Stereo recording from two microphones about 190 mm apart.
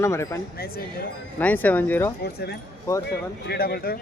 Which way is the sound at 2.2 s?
60° left (ahead or behind).